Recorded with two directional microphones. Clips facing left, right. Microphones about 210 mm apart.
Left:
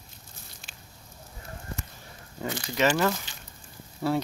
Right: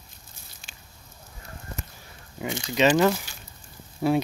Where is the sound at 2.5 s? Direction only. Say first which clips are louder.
Right 5 dB; 20° right (ahead or behind).